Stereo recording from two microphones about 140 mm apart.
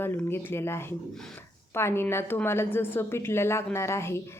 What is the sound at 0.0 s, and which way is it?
A woman's voice, 15° left (ahead or behind).